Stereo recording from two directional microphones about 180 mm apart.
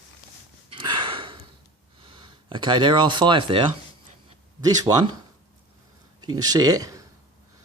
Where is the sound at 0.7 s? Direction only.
25° right (ahead or behind).